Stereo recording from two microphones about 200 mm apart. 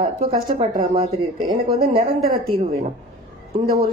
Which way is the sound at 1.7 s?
45° right (ahead or behind).